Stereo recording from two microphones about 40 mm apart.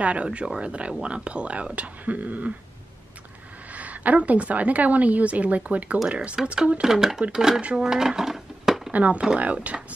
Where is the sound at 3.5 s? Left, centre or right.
Right.